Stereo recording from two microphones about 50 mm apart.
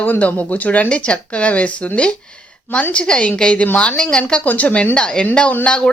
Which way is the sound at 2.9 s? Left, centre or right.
Left.